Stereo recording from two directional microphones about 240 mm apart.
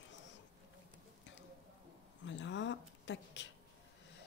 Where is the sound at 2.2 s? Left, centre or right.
Left.